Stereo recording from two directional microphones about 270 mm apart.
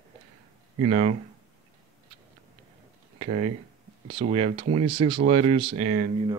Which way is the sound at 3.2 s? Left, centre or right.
Right.